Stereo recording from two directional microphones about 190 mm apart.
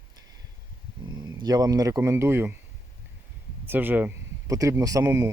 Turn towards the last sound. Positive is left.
turn(degrees=-15)  # may be behind; listen again after turning